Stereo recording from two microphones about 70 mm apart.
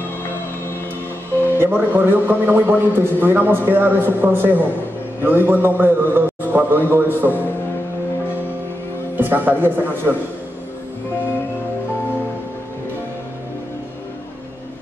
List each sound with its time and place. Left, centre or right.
1.6 s a man's voice: right
9.1 s a man's voice: right